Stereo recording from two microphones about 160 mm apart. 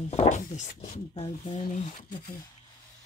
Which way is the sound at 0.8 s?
35° left (ahead or behind).